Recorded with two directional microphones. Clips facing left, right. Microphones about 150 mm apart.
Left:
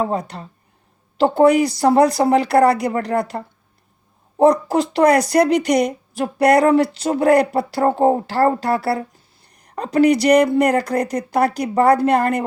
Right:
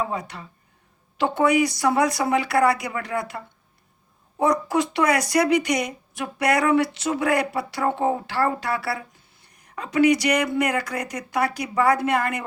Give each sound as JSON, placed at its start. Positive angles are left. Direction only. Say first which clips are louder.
{"t": 0.0, "sound": "speech", "louder": "left 6 dB", "side_deg": 35}